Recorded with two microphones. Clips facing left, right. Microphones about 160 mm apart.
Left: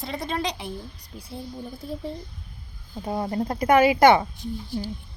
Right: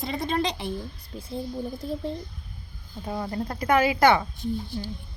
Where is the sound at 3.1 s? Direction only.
25° left (ahead or behind).